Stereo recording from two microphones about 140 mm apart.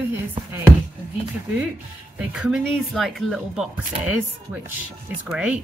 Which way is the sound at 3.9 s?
45° right (ahead or behind).